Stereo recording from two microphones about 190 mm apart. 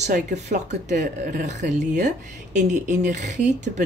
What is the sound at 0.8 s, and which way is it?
Speech, 40° right (ahead or behind).